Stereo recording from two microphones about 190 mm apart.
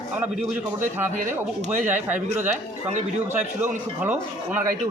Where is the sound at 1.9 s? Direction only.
10° right (ahead or behind).